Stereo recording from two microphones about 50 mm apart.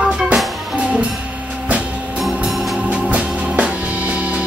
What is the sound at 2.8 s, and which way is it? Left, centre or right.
Music, right.